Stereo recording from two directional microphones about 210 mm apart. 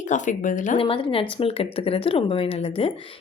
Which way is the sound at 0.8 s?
25° left (ahead or behind).